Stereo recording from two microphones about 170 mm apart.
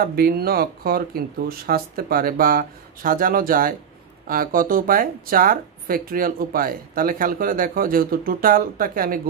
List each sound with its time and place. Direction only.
0.0 s speech: 60° right (ahead or behind)